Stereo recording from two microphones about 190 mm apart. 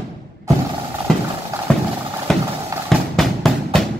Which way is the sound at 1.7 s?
5° left (ahead or behind).